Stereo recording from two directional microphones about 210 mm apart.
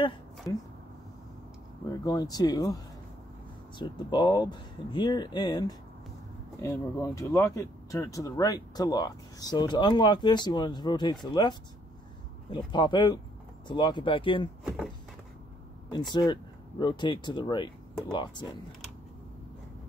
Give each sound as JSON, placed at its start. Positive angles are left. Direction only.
{"t": 0.5, "sound": "speech", "side_deg": 15}
{"t": 2.0, "sound": "speech", "side_deg": 20}
{"t": 12.4, "sound": "speech", "side_deg": 20}
{"t": 14.6, "sound": "speech", "side_deg": -5}
{"t": 15.9, "sound": "speech", "side_deg": 20}